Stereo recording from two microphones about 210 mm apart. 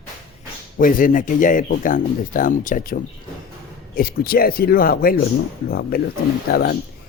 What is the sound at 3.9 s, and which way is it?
Speech, 45° left (ahead or behind).